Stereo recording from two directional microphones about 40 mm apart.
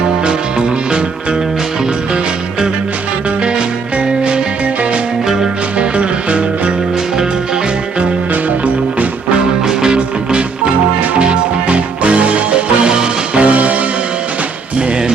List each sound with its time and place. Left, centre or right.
9.6 s music: centre
11.7 s music: right
13.4 s music: right